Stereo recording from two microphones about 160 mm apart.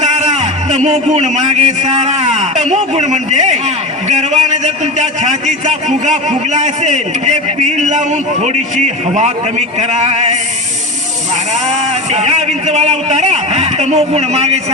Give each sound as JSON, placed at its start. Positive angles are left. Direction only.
{"t": 0.0, "sound": "a man's voice", "side_deg": -45}
{"t": 11.7, "sound": "a man's voice", "side_deg": -45}